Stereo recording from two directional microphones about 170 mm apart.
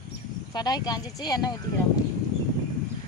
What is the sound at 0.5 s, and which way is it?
Speech, 25° left (ahead or behind).